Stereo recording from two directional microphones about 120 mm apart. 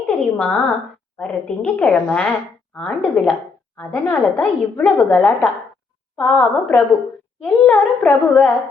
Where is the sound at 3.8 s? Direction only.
20° left (ahead or behind).